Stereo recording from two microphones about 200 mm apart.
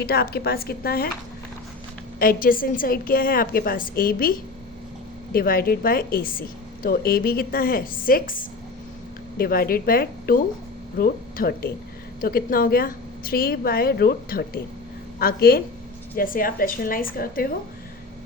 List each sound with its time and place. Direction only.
0.0 s a woman's voice: 50° left (ahead or behind)
2.1 s a woman's voice: 45° left (ahead or behind)